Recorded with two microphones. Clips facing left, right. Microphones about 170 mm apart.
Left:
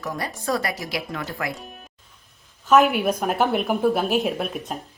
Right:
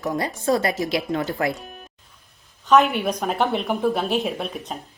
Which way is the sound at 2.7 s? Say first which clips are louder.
Even; 5° left (ahead or behind).